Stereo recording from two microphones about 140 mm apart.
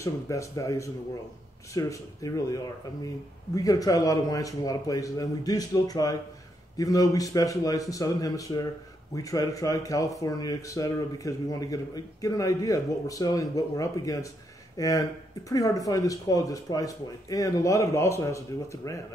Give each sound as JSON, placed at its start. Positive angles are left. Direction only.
{"t": 0.0, "sound": "speech", "side_deg": 20}